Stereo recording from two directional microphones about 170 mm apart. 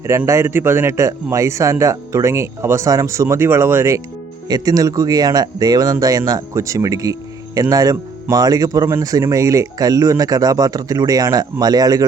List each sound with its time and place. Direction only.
0.0 s a man's voice: 15° right (ahead or behind)